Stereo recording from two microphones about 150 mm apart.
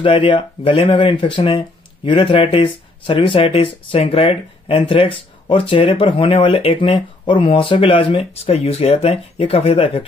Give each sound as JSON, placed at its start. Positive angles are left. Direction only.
{"t": 0.0, "sound": "speech", "side_deg": 35}